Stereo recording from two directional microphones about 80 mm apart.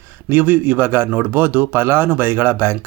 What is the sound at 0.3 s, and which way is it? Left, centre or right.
Speech, right.